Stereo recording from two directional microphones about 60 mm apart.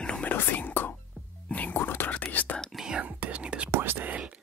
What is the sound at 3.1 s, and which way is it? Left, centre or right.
Whispering, right.